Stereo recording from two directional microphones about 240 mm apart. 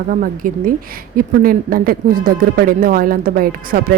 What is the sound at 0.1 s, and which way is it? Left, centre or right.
Speech, right.